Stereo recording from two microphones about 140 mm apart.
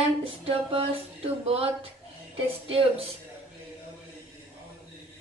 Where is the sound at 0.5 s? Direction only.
40° right (ahead or behind).